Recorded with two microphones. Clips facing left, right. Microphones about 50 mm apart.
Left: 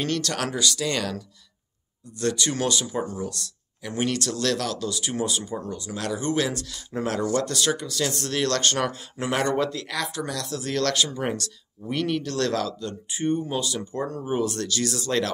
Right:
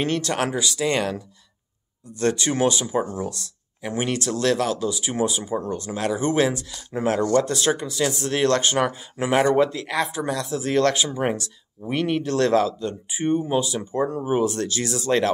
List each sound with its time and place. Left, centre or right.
0.0 s speech: right
5.6 s speech: right
5.9 s speech: right
6.7 s speech: centre
7.4 s speech: right